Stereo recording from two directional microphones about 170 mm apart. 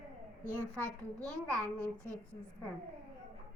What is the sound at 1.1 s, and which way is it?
Speech, 5° left (ahead or behind).